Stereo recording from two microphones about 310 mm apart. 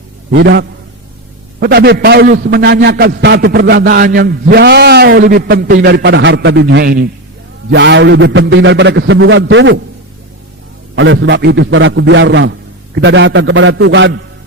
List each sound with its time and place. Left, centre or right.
0.3 s a man's voice: right
10.9 s a man's voice: right